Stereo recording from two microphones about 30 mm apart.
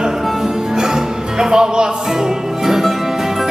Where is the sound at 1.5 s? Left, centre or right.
Right.